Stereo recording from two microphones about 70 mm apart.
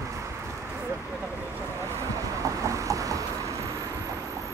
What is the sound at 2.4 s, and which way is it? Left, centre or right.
Vehicle, right.